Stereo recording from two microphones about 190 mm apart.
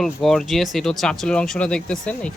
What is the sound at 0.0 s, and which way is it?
Speech, centre (ahead or behind).